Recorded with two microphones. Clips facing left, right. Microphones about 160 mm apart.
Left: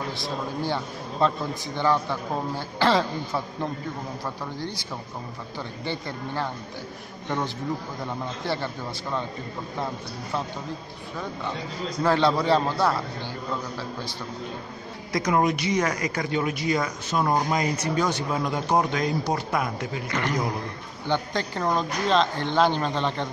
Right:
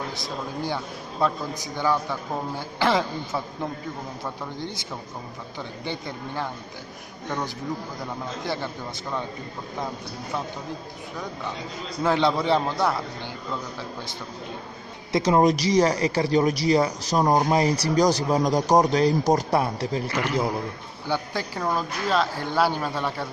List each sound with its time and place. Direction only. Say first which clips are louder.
1.2 s speech: left 1 dB; 10° right (ahead or behind)
5.6 s speech: left 1 dB; 15° right (ahead or behind)
8.5 s speech: left 1 dB; 15° right (ahead or behind)
12.0 s speech: even; 15° right (ahead or behind)
15.1 s speech: right 4 dB; 30° right (ahead or behind)
20.1 s a man's voice: even; 5° right (ahead or behind)